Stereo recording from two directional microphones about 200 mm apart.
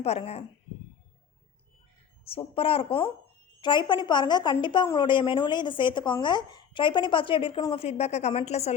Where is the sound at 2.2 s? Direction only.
30° left (ahead or behind).